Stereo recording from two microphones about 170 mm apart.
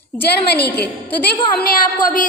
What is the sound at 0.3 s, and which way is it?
Speech, 70° left (ahead or behind).